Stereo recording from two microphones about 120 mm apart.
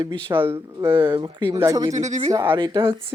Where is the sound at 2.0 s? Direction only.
80° right.